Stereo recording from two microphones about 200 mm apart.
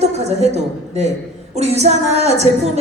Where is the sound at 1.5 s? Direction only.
30° right (ahead or behind).